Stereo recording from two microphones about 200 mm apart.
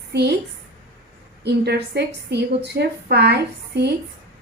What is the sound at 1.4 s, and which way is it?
A woman's voice, 55° right (ahead or behind).